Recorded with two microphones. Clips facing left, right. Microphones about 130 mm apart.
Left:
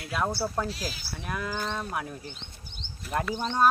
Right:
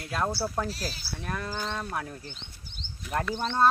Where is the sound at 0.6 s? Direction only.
35° right (ahead or behind).